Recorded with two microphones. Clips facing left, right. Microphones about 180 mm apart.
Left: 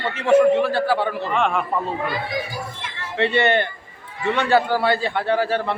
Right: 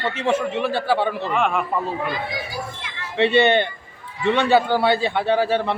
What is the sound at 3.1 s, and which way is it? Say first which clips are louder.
Speech: right 2 dB; 20° right (ahead or behind).